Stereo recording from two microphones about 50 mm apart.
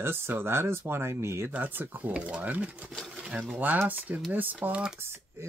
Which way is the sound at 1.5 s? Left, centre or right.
Right.